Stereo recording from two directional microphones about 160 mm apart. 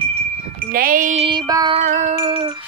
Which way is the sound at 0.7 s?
65° right (ahead or behind).